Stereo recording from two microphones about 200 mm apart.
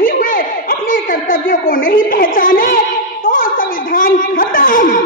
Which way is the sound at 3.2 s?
45° left (ahead or behind).